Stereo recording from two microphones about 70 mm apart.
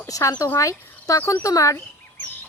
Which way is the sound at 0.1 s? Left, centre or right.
Left.